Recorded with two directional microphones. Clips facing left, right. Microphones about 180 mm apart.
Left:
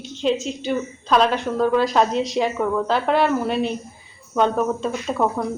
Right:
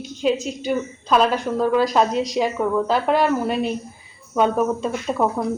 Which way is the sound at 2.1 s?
40° right (ahead or behind).